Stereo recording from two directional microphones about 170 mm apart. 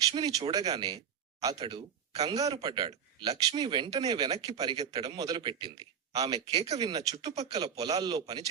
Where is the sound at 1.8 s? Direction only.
35° right (ahead or behind).